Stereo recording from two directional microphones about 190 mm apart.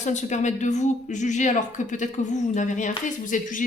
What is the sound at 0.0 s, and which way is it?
A woman's voice, 40° left (ahead or behind).